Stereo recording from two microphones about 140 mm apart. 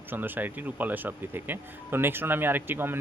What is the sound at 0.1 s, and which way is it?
Speech, 15° right (ahead or behind).